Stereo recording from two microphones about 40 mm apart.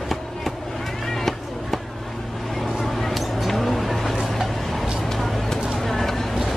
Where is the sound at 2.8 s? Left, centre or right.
Centre.